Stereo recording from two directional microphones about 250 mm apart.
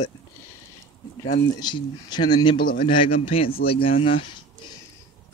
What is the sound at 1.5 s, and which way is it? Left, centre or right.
Speech, centre.